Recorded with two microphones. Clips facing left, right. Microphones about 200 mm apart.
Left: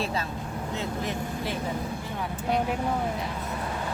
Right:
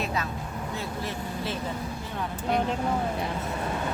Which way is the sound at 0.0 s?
30° left (ahead or behind).